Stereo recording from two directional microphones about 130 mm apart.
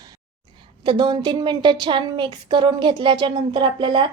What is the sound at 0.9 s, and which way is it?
A woman's voice, 35° right (ahead or behind).